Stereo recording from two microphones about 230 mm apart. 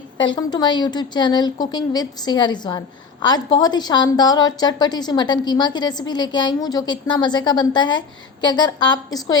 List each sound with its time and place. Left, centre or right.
0.2 s a woman's voice: centre